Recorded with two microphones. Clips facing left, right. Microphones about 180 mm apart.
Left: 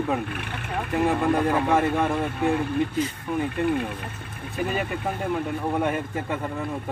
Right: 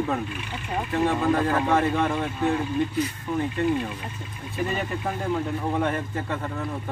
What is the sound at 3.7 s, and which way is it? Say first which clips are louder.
Speech: even; 60° left (ahead or behind).